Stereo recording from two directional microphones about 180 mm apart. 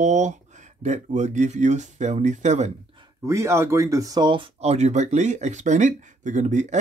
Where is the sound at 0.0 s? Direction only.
40° right (ahead or behind).